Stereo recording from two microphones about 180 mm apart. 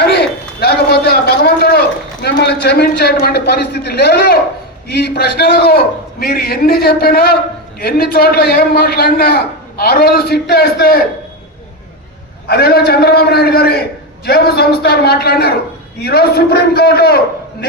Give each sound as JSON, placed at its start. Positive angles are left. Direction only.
{"t": 0.0, "sound": "a sound", "side_deg": 65}
{"t": 2.2, "sound": "a man's voice", "side_deg": 65}
{"t": 12.5, "sound": "a man's voice", "side_deg": 60}